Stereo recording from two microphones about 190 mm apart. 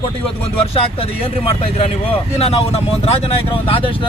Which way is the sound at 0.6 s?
30° left (ahead or behind).